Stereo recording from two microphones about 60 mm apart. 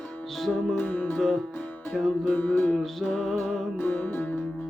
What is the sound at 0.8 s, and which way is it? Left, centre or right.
Music, left.